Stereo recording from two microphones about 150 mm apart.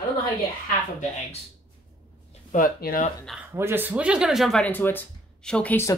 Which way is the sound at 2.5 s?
75° left (ahead or behind).